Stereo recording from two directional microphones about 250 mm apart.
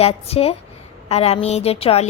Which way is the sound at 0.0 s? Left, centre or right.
Left.